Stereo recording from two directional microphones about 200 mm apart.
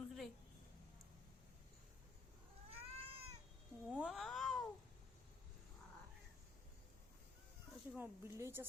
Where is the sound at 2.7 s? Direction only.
30° right (ahead or behind).